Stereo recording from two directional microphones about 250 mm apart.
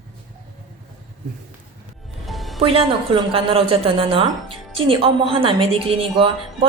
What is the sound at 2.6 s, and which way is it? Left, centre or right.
A woman's voice, right.